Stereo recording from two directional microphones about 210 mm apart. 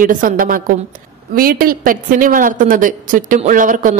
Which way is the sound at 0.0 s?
40° right (ahead or behind).